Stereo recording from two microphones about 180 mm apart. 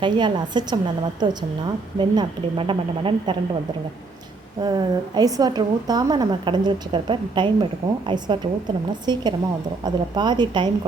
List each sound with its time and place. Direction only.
0.0 s a woman's voice: 25° right (ahead or behind)
4.6 s a woman's voice: 20° right (ahead or behind)